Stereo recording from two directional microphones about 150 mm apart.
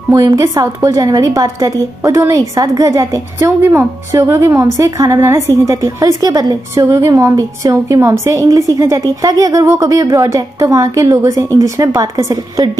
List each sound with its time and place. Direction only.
0.1 s a woman's voice: 25° right (ahead or behind)